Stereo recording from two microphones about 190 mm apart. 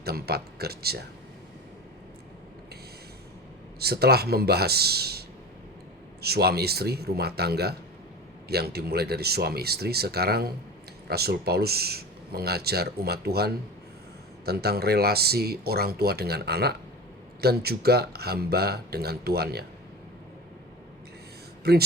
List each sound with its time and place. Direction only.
0.0 s speech: 55° right (ahead or behind)
3.8 s speech: 55° right (ahead or behind)
6.2 s speech: 55° right (ahead or behind)
21.7 s speech: 55° right (ahead or behind)